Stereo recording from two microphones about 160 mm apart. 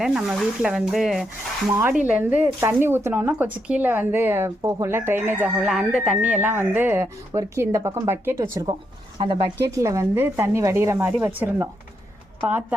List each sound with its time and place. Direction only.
0.0 s speech: 5° right (ahead or behind)
1.7 s a woman's voice: 15° right (ahead or behind)